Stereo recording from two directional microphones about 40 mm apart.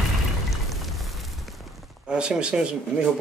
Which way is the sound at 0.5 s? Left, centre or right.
Centre.